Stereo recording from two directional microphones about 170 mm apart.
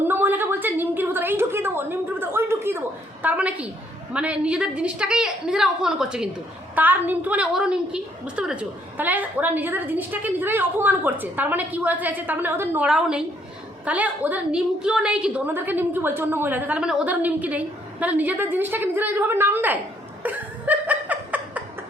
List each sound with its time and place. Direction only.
0.0 s a sound: 10° right (ahead or behind)
4.1 s a woman's voice: 5° right (ahead or behind)
20.2 s laughter: 10° right (ahead or behind)